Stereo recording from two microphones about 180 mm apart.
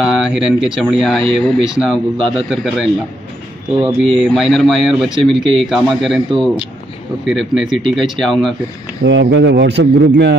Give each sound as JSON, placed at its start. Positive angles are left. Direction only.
{"t": 0.0, "sound": "speech", "side_deg": 0}
{"t": 9.0, "sound": "a man's voice", "side_deg": -75}